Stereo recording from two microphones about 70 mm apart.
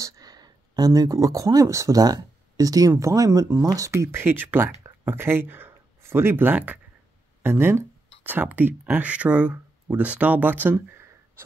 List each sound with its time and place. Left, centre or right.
0.0 s speech: right
2.0 s speech: right
3.0 s speech: right
7.4 s speech: right